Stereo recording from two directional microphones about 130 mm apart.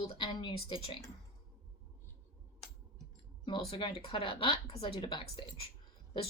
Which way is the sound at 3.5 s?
40° left (ahead or behind).